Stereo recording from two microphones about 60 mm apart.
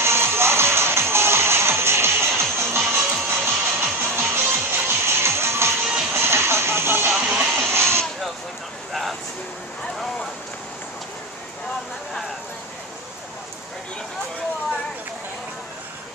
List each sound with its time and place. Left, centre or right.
0.0 s music: right